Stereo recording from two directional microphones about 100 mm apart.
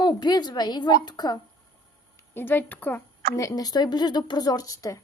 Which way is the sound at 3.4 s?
40° left (ahead or behind).